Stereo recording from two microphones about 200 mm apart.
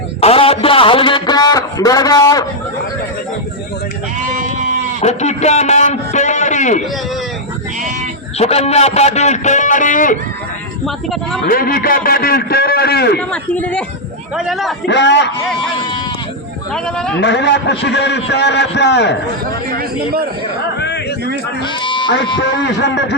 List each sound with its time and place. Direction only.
0.2 s a man's voice: 30° left (ahead or behind)
4.9 s a sound: 35° left (ahead or behind)
8.4 s a man's voice: 30° left (ahead or behind)
10.8 s a man's voice: centre (ahead or behind)
11.4 s a man's voice: 50° left (ahead or behind)
13.1 s a man's voice: 5° left (ahead or behind)
14.8 s a man's voice: 60° left (ahead or behind)
16.7 s a man's voice: 5° left (ahead or behind)
17.2 s a man's voice: 60° left (ahead or behind)
19.7 s a man's voice: 50° right (ahead or behind)
20.7 s a sound: 60° left (ahead or behind)
21.8 s sheep: 25° left (ahead or behind)
22.4 s a man's voice: 60° left (ahead or behind)